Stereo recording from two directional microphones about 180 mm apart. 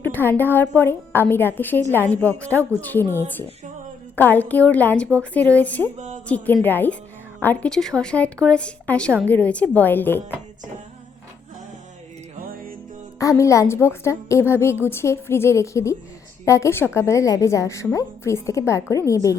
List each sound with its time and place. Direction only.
0.0 s a woman's voice: 10° left (ahead or behind)
13.1 s a woman's voice: 15° left (ahead or behind)